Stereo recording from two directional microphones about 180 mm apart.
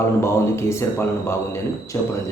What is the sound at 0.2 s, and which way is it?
Speech, 15° left (ahead or behind).